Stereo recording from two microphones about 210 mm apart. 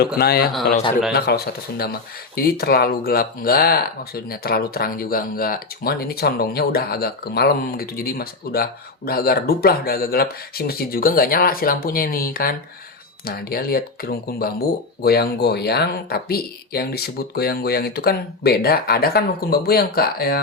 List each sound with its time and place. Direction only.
0.2 s speech: 45° left (ahead or behind)